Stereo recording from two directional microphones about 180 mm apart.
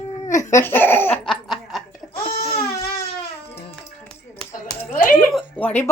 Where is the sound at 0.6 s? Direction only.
10° left (ahead or behind).